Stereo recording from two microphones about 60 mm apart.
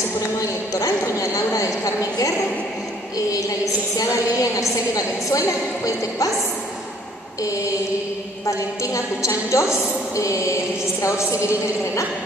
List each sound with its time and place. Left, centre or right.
0.4 s a sound: left
4.0 s a woman's voice: left
5.9 s a woman's voice: left
8.5 s a woman's voice: left